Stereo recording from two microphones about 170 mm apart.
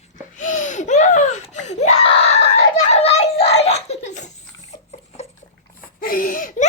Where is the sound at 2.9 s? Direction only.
40° left (ahead or behind).